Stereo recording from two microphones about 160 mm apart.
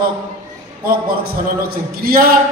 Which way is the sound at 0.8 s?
70° right (ahead or behind).